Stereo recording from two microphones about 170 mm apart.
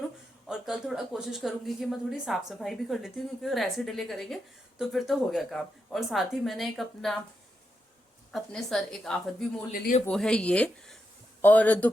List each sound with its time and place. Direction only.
0.4 s speech: centre (ahead or behind)
8.3 s speech: centre (ahead or behind)
9.7 s speech: 55° left (ahead or behind)
10.1 s speech: 5° left (ahead or behind)